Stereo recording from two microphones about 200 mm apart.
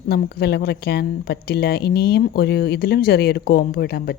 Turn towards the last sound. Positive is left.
turn(degrees=50)  # may be behind; listen again after turning